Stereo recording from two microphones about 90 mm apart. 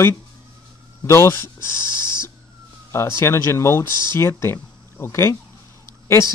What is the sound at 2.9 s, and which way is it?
Speech, 30° left (ahead or behind).